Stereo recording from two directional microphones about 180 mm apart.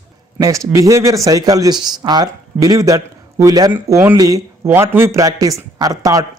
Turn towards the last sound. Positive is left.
turn(degrees=-20)  # may be behind; listen again after turning